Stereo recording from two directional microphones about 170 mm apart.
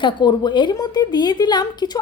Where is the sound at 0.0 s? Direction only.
25° left (ahead or behind).